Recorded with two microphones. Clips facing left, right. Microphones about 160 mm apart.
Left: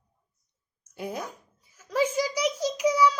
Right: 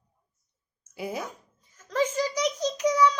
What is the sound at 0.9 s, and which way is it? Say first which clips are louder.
Speech: right 1 dB; 5° right (ahead or behind).